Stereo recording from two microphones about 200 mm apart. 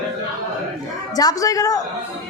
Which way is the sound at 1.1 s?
15° left (ahead or behind).